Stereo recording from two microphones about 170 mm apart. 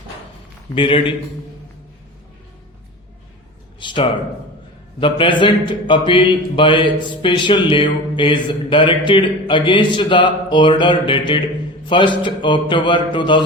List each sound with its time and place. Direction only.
0.8 s a man's voice: 30° left (ahead or behind)
3.8 s a man's voice: 30° left (ahead or behind)